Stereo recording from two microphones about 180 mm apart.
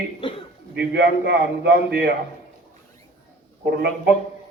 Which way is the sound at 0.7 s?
70° right (ahead or behind).